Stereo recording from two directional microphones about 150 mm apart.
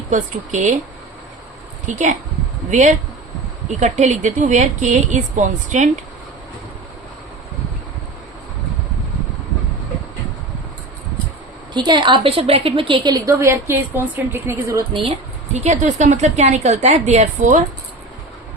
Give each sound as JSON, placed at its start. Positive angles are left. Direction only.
{"t": 0.1, "sound": "speech", "side_deg": -55}
{"t": 1.9, "sound": "a woman's voice", "side_deg": -55}
{"t": 11.7, "sound": "a woman's voice", "side_deg": -30}
{"t": 15.5, "sound": "speech", "side_deg": -50}